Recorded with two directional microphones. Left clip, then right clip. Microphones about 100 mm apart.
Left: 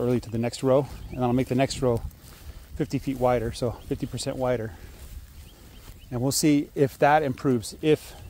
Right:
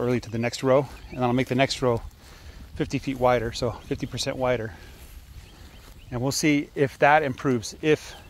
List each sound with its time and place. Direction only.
0.0 s speech: 35° left (ahead or behind)
1.1 s speech: 25° left (ahead or behind)
6.2 s speech: 50° left (ahead or behind)